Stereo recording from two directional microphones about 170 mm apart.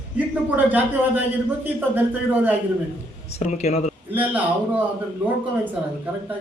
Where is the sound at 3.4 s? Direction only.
40° left (ahead or behind).